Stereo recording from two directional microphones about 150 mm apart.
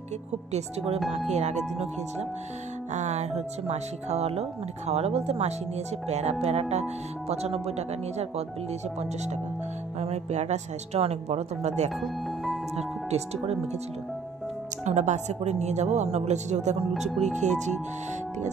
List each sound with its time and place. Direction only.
0.5 s speech: 45° right (ahead or behind)
9.9 s speech: 45° right (ahead or behind)
14.9 s speech: 50° right (ahead or behind)